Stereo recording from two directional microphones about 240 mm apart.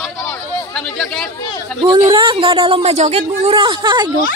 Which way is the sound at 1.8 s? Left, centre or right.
Centre.